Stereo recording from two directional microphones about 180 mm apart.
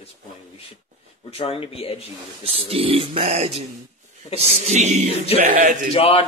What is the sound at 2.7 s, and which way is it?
Speech, 30° right (ahead or behind).